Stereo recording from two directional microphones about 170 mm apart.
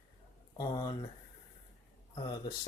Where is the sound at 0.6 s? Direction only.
25° left (ahead or behind).